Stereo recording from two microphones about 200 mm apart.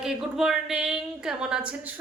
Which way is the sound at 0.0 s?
Centre (ahead or behind).